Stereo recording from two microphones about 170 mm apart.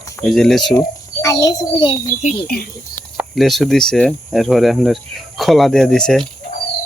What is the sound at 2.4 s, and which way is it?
Speech, 60° left (ahead or behind).